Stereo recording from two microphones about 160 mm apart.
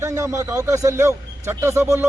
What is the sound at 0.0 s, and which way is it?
A man's voice, 15° right (ahead or behind).